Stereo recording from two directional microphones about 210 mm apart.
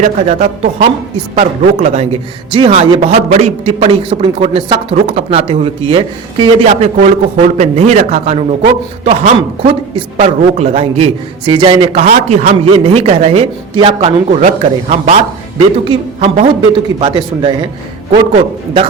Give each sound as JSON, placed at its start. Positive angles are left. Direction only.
{"t": 0.0, "sound": "speech", "side_deg": -35}